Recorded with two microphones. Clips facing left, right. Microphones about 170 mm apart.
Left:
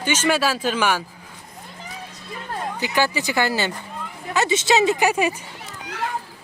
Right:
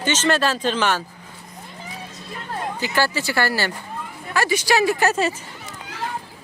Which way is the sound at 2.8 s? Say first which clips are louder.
Left 1 dB; 15° left (ahead or behind).